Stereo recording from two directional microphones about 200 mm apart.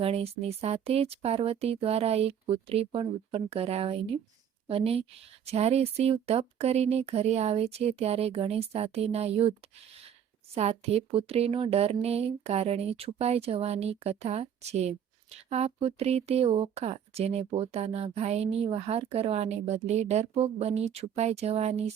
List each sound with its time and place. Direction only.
0.0 s speech: 30° right (ahead or behind)